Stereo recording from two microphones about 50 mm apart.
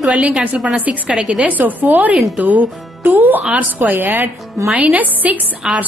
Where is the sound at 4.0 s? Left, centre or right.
Right.